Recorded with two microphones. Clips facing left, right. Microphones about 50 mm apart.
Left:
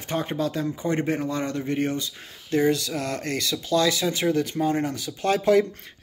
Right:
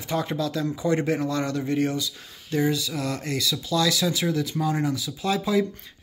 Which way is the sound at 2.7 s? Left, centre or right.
Left.